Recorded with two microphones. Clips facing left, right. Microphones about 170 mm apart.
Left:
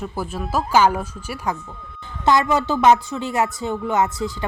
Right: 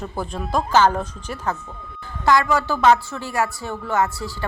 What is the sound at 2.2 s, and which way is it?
A woman's voice, 20° left (ahead or behind).